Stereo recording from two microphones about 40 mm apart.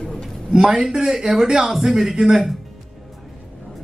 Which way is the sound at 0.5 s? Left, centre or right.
Right.